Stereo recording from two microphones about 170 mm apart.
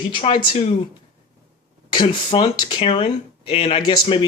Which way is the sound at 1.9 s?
25° left (ahead or behind).